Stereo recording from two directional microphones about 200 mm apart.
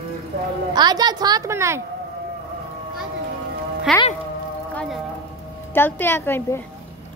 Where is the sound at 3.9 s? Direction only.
Centre (ahead or behind).